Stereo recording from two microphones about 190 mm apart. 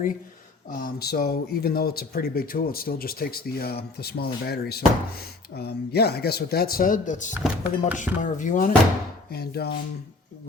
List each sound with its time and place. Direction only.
0.7 s speech: 50° left (ahead or behind)
7.3 s speech: 5° right (ahead or behind)
8.2 s speech: 40° left (ahead or behind)
9.3 s speech: 55° left (ahead or behind)